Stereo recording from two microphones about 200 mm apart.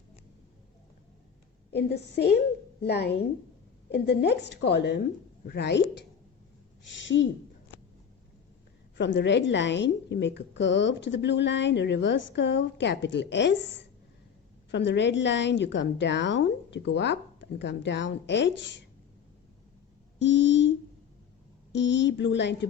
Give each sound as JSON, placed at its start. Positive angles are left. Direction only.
{"t": 1.7, "sound": "speech", "side_deg": 55}
{"t": 6.8, "sound": "speech", "side_deg": 65}
{"t": 9.0, "sound": "speech", "side_deg": 65}
{"t": 14.7, "sound": "speech", "side_deg": 60}
{"t": 20.1, "sound": "speech", "side_deg": 65}